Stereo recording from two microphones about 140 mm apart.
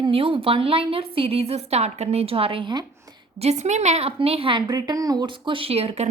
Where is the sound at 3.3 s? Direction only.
50° right (ahead or behind).